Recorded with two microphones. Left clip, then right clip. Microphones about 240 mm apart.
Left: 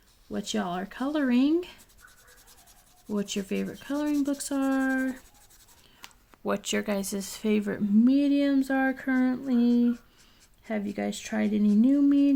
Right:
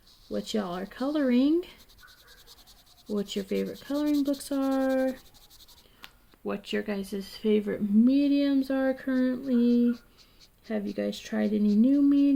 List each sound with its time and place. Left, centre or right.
0.3 s speech: left
3.2 s speech: left
6.4 s speech: left